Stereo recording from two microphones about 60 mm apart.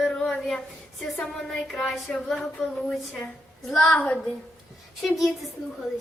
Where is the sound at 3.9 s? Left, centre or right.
Centre.